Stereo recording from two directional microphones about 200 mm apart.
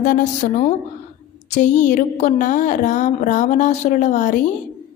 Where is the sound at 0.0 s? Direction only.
40° left (ahead or behind).